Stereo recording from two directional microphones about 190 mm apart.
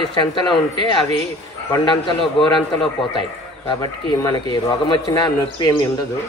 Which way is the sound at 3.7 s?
25° left (ahead or behind).